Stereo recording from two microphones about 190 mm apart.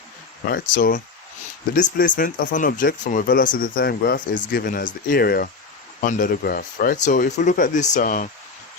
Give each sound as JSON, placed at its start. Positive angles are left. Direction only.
{"t": 0.4, "sound": "speech", "side_deg": 50}